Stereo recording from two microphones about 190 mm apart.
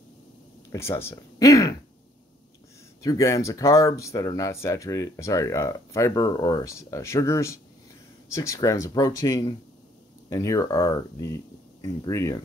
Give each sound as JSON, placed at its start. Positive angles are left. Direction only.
{"t": 0.7, "sound": "speech", "side_deg": 15}
{"t": 3.0, "sound": "speech", "side_deg": 15}